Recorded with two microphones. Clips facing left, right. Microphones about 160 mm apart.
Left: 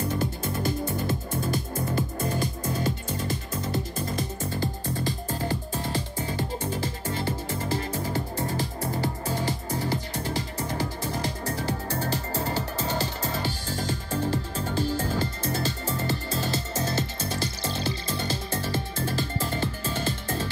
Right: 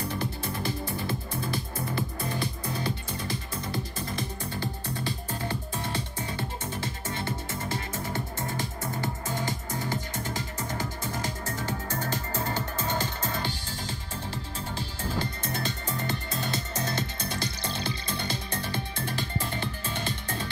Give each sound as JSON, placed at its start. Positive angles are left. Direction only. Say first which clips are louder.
{"t": 0.2, "sound": "music", "louder": "left 4 dB", "side_deg": 45}